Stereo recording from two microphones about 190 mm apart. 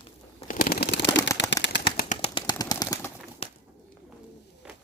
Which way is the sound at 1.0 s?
20° left (ahead or behind).